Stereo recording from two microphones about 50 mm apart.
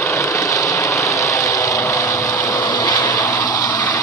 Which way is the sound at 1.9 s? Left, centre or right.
Left.